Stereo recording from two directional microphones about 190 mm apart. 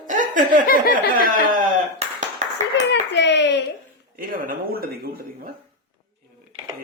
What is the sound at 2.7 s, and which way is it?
Speech, 65° left (ahead or behind).